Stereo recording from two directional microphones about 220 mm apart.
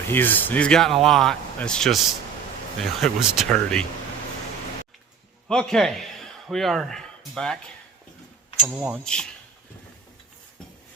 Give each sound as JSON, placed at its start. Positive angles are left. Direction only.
{"t": 0.1, "sound": "speech", "side_deg": 10}
{"t": 5.5, "sound": "speech", "side_deg": 5}
{"t": 8.6, "sound": "speech", "side_deg": -5}